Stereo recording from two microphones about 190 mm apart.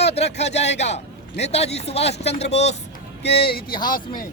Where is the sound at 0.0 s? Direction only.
35° left (ahead or behind).